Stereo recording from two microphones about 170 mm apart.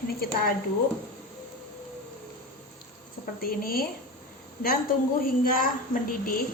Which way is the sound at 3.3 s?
60° left (ahead or behind).